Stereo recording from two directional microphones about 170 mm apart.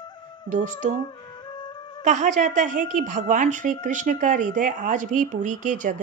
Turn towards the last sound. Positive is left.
turn(degrees=-50)  # may be behind; listen again after turning